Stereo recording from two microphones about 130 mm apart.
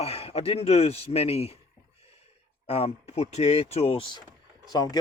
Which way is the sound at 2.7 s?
50° left (ahead or behind).